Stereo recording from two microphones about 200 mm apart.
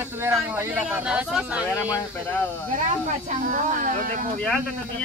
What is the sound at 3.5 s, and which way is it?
Speech, 40° right (ahead or behind).